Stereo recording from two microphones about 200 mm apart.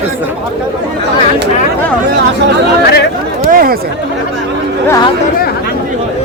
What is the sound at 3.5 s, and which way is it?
Chatter, 45° right (ahead or behind).